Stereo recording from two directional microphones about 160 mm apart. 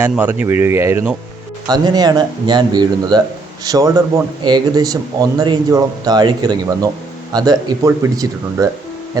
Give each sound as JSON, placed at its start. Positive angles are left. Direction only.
{"t": 0.0, "sound": "a man's voice", "side_deg": -10}